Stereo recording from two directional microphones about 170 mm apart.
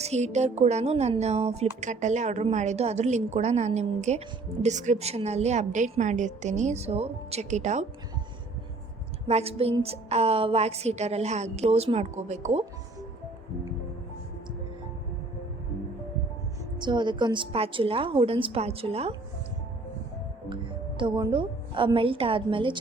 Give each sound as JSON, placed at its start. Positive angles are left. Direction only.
{"t": 0.0, "sound": "a woman's voice", "side_deg": -40}
{"t": 9.2, "sound": "a woman's voice", "side_deg": -35}
{"t": 16.8, "sound": "a woman's voice", "side_deg": -25}
{"t": 21.0, "sound": "a woman's voice", "side_deg": -30}